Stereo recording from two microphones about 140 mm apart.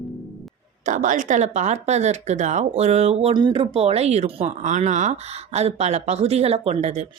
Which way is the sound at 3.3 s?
35° right (ahead or behind).